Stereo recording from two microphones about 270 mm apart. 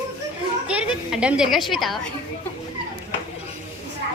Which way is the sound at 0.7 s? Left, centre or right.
Centre.